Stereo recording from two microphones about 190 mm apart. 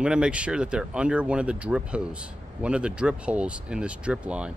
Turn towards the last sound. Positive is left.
turn(degrees=-5)  # may be behind; listen again after turning